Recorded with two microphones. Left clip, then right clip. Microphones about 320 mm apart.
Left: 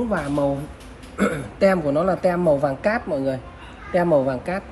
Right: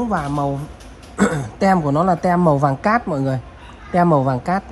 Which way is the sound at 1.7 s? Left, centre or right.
Right.